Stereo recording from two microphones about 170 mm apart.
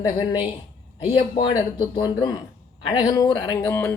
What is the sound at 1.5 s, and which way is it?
A man's voice, 25° left (ahead or behind).